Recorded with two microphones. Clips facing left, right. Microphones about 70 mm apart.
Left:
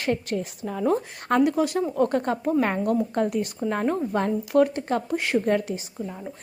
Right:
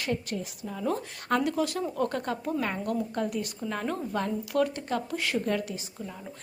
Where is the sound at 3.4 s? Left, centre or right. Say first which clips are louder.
Left 7 dB; left.